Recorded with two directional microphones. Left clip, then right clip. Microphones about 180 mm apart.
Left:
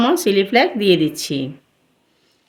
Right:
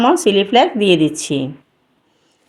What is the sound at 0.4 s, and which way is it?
Speech, 20° right (ahead or behind).